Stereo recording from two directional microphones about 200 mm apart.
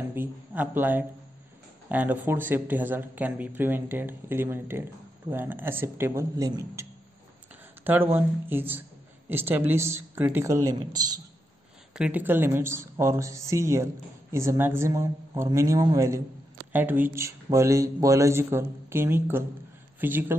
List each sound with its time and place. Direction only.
0.1 s a sound: 10° right (ahead or behind)
1.9 s a man's voice: 10° right (ahead or behind)
11.9 s speech: 5° right (ahead or behind)